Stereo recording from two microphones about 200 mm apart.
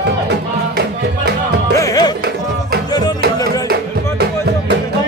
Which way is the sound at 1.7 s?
20° left (ahead or behind).